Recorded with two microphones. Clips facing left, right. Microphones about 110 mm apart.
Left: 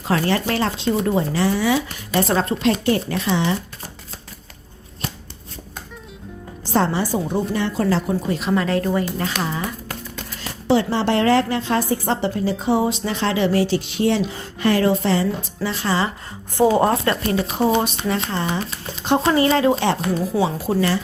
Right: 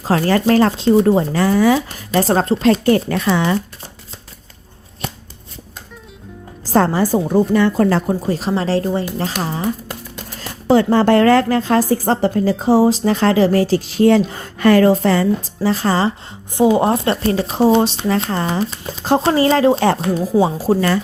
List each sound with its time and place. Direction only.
0.1 s a woman's voice: 40° right (ahead or behind)
6.7 s a woman's voice: 45° right (ahead or behind)
10.3 s a woman's voice: 45° right (ahead or behind)
16.6 s speech: 15° right (ahead or behind); by 20.7 s 35° right (ahead or behind)